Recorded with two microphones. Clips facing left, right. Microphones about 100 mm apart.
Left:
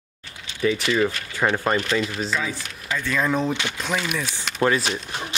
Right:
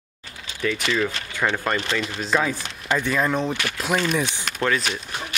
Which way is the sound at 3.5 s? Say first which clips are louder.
Left 1 dB; 20° left (ahead or behind).